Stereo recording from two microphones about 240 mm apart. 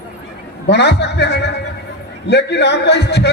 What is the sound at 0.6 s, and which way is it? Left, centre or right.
A man's voice, left.